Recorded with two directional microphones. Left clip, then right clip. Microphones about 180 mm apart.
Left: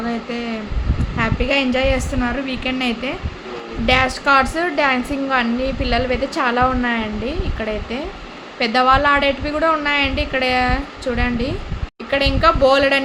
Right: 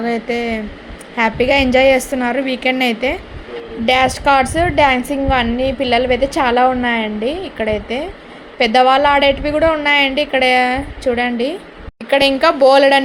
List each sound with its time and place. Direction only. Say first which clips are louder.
0.0 s a woman's voice: right 6 dB; 30° right (ahead or behind)
12.1 s a woman's voice: right 4 dB; 40° right (ahead or behind)